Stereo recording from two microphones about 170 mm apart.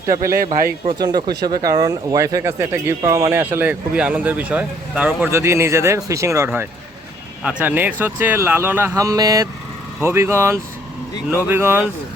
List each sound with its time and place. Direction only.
0.3 s speech: 55° right (ahead or behind)
0.9 s speech: 25° right (ahead or behind)